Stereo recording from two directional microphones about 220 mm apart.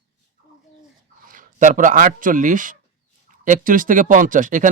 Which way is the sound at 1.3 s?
35° right (ahead or behind).